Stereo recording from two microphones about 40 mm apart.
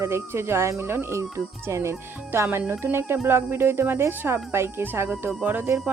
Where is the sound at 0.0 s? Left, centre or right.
Right.